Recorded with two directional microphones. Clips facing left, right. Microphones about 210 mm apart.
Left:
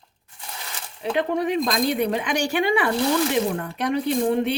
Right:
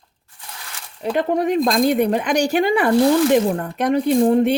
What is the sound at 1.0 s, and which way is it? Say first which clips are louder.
Speech: right 4 dB; 45° right (ahead or behind).